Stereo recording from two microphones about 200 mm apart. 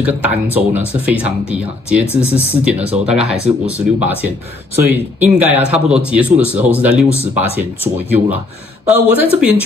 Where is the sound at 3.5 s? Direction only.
30° right (ahead or behind).